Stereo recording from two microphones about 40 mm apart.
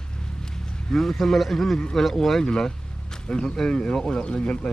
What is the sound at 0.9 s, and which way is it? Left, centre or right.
Speech, centre.